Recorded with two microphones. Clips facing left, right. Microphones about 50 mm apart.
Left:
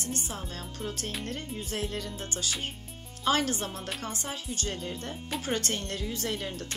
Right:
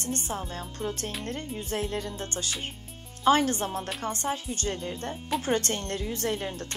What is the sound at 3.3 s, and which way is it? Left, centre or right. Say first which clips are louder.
Speech: right 5 dB; right.